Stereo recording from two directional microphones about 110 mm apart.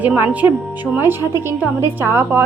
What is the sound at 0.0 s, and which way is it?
Speech, 10° right (ahead or behind).